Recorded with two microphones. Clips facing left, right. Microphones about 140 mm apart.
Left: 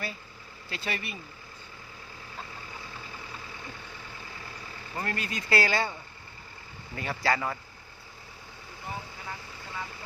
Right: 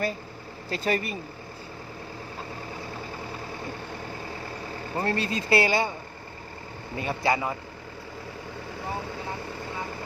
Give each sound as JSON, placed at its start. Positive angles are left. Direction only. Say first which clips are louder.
{"t": 0.7, "sound": "speech", "louder": "right 9 dB", "side_deg": -40}
{"t": 4.9, "sound": "speech", "louder": "right 7 dB", "side_deg": -30}
{"t": 6.9, "sound": "speech", "louder": "right 3 dB", "side_deg": -20}